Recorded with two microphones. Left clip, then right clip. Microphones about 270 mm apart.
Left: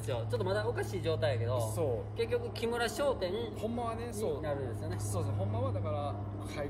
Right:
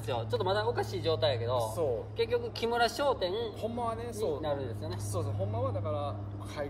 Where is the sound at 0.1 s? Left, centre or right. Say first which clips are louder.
Right 3 dB; centre.